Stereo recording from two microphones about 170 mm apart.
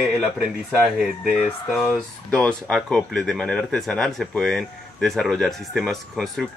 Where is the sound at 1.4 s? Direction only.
Centre (ahead or behind).